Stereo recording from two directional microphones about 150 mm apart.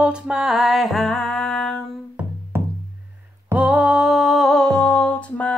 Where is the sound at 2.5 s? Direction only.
15° right (ahead or behind).